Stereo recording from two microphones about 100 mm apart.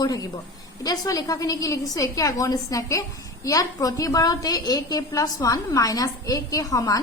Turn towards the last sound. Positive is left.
turn(degrees=35)  # may be behind; listen again after turning